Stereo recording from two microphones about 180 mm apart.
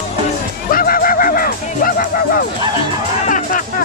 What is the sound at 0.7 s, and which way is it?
Music, 50° left (ahead or behind).